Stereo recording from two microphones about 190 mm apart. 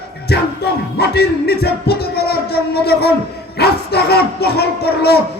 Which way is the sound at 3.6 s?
55° left (ahead or behind).